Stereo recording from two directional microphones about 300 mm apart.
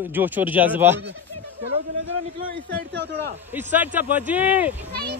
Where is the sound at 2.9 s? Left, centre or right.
Right.